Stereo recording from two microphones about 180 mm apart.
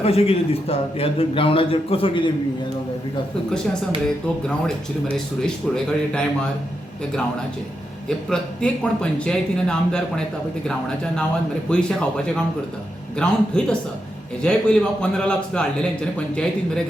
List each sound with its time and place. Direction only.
0.0 s a man's voice: 35° left (ahead or behind)
5.1 s a man's voice: 5° left (ahead or behind)
8.0 s a man's voice: 5° left (ahead or behind)